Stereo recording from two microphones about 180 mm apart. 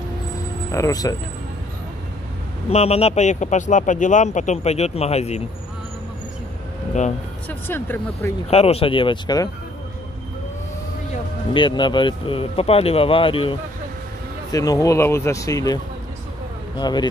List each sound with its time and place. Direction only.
0.7 s speech: 15° left (ahead or behind)
2.7 s speech: 35° left (ahead or behind)
7.4 s speech: 10° left (ahead or behind)
8.5 s speech: 35° left (ahead or behind)
11.5 s speech: 25° left (ahead or behind)
14.5 s speech: 20° left (ahead or behind)